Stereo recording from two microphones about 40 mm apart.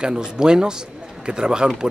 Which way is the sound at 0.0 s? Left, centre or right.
Centre.